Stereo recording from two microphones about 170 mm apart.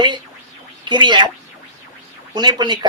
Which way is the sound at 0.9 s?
25° right (ahead or behind).